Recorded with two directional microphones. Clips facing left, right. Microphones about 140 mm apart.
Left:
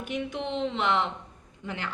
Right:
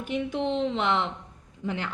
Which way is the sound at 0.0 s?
30° right (ahead or behind).